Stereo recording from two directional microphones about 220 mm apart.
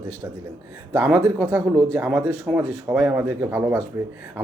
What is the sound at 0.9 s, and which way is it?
Speech, 15° right (ahead or behind).